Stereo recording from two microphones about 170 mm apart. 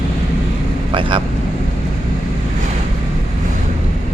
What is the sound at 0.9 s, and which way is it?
Speech, 30° right (ahead or behind).